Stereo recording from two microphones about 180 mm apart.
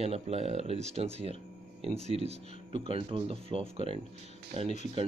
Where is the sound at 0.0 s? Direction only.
35° right (ahead or behind).